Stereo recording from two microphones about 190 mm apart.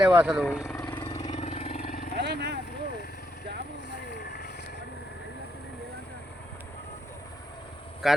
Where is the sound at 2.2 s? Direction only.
60° right (ahead or behind).